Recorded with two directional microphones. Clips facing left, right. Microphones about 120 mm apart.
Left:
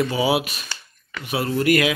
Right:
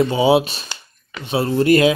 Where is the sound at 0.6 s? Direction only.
25° right (ahead or behind).